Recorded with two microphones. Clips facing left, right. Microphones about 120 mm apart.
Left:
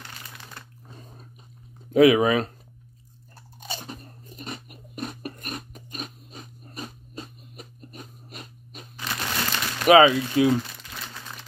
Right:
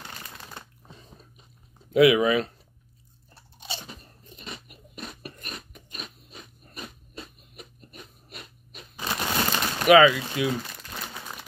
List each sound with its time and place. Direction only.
0.8 s biting: 50° left (ahead or behind)
1.9 s speech: 40° left (ahead or behind)
3.5 s crunch: 45° left (ahead or behind)
9.0 s a sound: 25° right (ahead or behind)
9.8 s speech: 30° left (ahead or behind)
10.9 s crumpling: 15° right (ahead or behind)